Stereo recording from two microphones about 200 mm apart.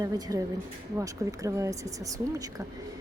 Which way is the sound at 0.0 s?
15° right (ahead or behind).